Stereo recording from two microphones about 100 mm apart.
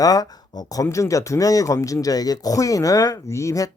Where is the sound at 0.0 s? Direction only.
40° left (ahead or behind).